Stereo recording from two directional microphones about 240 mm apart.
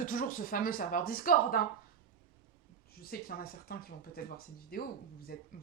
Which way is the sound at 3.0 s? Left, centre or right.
Left.